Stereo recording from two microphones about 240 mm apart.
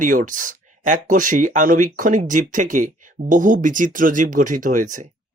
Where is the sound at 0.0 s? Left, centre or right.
Right.